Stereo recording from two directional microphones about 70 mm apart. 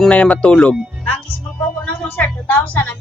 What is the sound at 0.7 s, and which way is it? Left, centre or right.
Music, centre.